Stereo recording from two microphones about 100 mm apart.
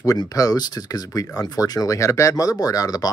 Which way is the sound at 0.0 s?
35° left (ahead or behind).